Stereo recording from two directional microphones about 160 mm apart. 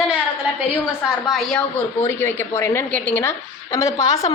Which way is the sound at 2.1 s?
15° left (ahead or behind).